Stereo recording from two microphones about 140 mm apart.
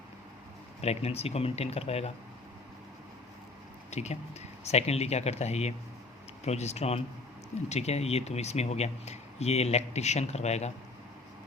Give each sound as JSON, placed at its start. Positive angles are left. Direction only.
{"t": 0.8, "sound": "speech", "side_deg": 50}
{"t": 3.9, "sound": "speech", "side_deg": 50}